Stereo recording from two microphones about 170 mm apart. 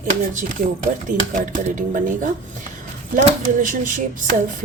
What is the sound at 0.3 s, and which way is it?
Speech, 50° right (ahead or behind).